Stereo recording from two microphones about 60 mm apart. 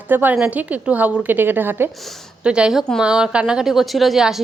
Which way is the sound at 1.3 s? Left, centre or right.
Right.